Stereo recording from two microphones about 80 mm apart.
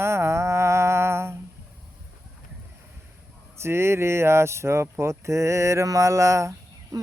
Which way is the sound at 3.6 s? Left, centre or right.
Right.